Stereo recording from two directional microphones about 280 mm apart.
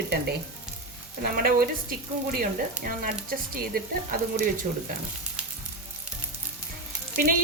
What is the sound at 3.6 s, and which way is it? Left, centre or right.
Speech, right.